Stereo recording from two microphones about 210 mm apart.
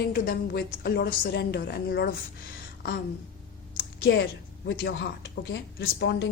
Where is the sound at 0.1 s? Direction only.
50° left (ahead or behind).